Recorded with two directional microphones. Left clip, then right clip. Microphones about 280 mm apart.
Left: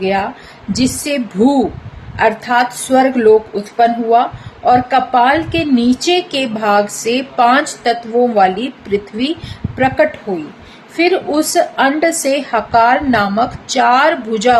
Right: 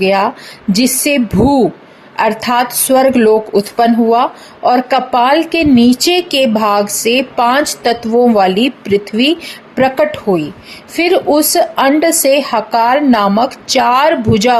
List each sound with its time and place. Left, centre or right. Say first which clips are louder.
0.0 s a woman's voice: right 5 dB; right